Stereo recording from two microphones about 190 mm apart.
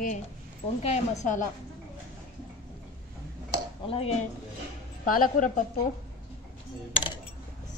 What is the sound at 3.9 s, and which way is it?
Speech, 30° left (ahead or behind).